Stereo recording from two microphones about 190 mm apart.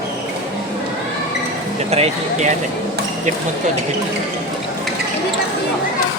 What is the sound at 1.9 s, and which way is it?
Speech, 35° right (ahead or behind).